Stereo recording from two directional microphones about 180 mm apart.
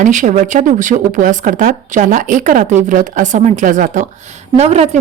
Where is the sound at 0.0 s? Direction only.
45° right (ahead or behind).